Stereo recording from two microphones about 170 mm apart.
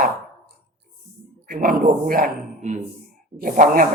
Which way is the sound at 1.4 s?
55° right (ahead or behind).